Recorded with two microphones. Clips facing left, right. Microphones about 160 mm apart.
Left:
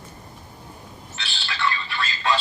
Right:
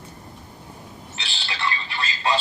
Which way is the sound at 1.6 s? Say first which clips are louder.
Left 2 dB; 20° right (ahead or behind).